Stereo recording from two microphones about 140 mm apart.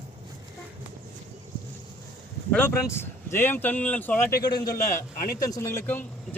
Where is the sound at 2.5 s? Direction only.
15° left (ahead or behind).